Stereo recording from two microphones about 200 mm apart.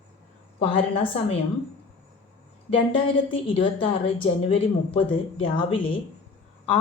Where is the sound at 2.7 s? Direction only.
25° left (ahead or behind).